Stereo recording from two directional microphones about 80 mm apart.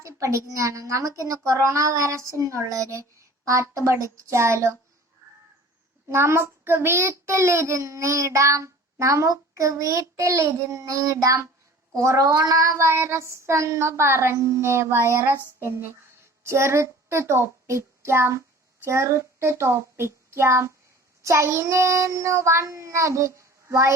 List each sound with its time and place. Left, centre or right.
0.0 s child singing: right
5.2 s crow: right
6.1 s child singing: right
16.4 s a child's voice: right
21.2 s child singing: right